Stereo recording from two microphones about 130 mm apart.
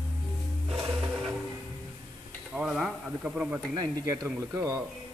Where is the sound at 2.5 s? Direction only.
5° right (ahead or behind).